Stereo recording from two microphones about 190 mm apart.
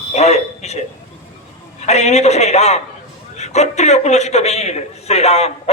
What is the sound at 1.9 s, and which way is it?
A man's voice, 35° left (ahead or behind).